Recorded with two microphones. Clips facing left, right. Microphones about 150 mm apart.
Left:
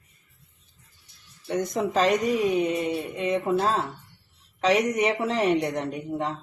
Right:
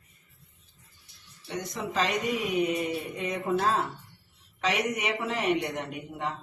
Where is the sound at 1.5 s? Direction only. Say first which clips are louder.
Left 8 dB; 50° left (ahead or behind).